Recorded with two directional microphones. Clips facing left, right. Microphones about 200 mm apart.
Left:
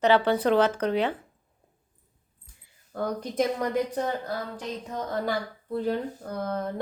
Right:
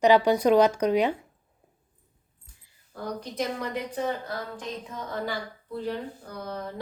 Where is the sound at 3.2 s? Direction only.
50° left (ahead or behind).